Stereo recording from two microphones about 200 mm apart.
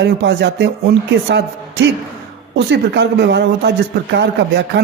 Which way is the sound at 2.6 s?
60° right (ahead or behind).